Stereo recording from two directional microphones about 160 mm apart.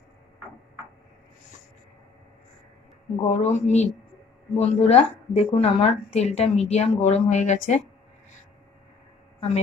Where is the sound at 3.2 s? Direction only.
45° left (ahead or behind).